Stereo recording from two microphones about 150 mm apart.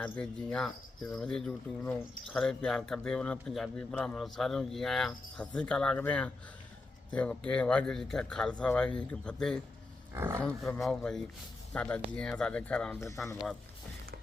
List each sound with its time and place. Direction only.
0.0 s speech: 5° left (ahead or behind)
10.2 s speech: 15° right (ahead or behind)
10.4 s speech: 5° left (ahead or behind)